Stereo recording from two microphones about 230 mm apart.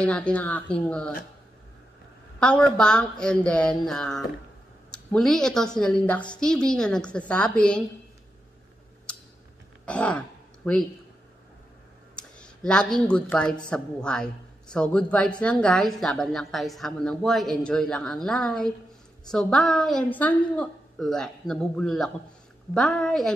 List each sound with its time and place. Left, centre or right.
0.0 s speech: centre
2.4 s speech: centre
9.8 s speech: centre
12.2 s speech: centre